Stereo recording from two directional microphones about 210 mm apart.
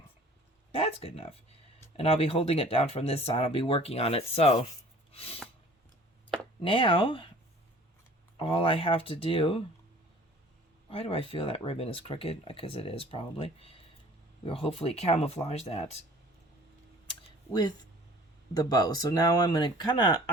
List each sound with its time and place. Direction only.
0.7 s speech: 25° left (ahead or behind)
6.6 s speech: 25° left (ahead or behind)
8.4 s speech: 25° left (ahead or behind)
10.8 s speech: 25° left (ahead or behind)
17.5 s speech: 20° left (ahead or behind)